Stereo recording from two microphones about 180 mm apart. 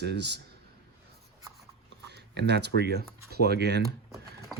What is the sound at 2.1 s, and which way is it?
Speech, 70° right (ahead or behind).